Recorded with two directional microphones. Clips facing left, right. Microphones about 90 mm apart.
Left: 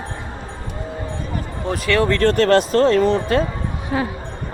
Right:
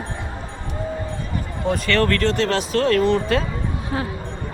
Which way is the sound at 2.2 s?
50° left (ahead or behind).